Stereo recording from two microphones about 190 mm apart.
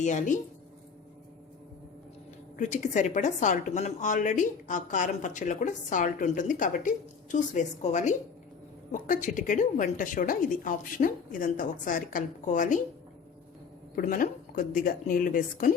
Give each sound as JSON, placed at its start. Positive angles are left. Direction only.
{"t": 0.0, "sound": "speech", "side_deg": 40}
{"t": 2.6, "sound": "a woman's voice", "side_deg": 40}
{"t": 13.9, "sound": "a woman's voice", "side_deg": 45}